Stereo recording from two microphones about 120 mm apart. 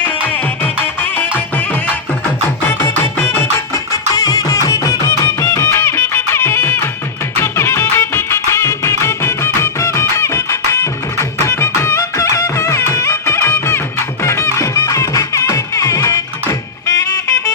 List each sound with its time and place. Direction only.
1.1 s music: 15° left (ahead or behind)